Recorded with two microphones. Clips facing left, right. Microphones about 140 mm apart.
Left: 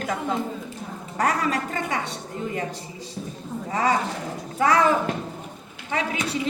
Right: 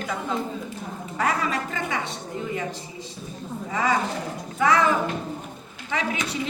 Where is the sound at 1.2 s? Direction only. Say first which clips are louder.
Left 2 dB; 40° left (ahead or behind).